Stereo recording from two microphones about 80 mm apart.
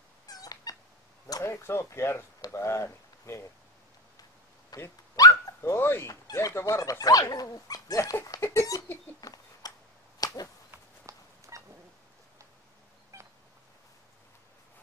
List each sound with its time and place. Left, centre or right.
0.3 s cat: left
1.4 s speech: left
4.7 s dog: left
5.6 s speech: left
9.2 s a sound: left
10.7 s a sound: right